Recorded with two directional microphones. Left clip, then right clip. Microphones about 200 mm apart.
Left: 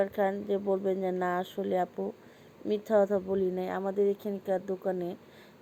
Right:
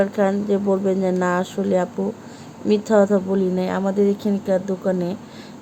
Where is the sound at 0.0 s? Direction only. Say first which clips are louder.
Right 9 dB; 5° left (ahead or behind).